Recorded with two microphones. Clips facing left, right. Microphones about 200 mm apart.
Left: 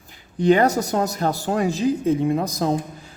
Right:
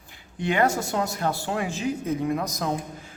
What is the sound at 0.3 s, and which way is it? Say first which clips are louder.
Speech: left 7 dB; 40° left (ahead or behind).